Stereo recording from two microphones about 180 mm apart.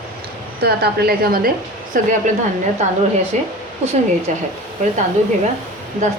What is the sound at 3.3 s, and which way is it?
Speech, 40° right (ahead or behind).